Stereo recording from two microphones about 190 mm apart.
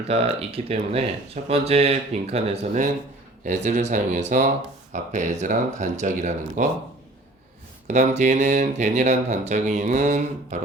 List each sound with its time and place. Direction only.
0.1 s speech: 30° right (ahead or behind)
7.9 s speech: 40° right (ahead or behind)